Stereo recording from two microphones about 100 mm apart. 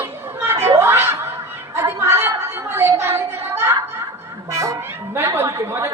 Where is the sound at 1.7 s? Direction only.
25° right (ahead or behind).